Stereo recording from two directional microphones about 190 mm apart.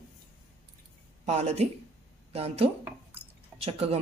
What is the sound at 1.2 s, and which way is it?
Speech, 35° right (ahead or behind).